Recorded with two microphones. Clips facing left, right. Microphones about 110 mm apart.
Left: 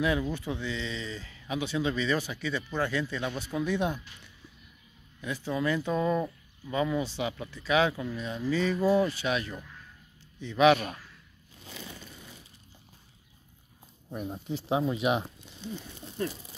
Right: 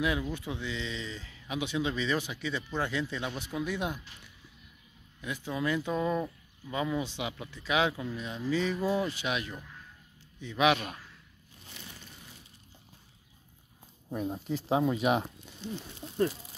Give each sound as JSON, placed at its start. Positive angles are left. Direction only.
{"t": 0.0, "sound": "speech", "side_deg": -10}
{"t": 5.2, "sound": "speech", "side_deg": -15}
{"t": 9.6, "sound": "a sound", "side_deg": -10}
{"t": 10.4, "sound": "speech", "side_deg": -10}
{"t": 14.1, "sound": "speech", "side_deg": -45}